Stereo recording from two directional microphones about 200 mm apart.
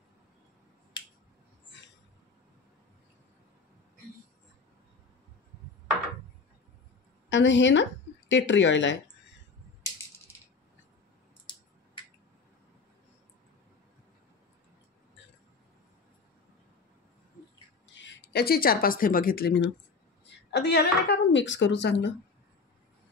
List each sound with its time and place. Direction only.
1.0 s finger snapping: 25° left (ahead or behind)
7.2 s a woman's voice: 65° left (ahead or behind)
17.9 s a woman's voice: 60° left (ahead or behind)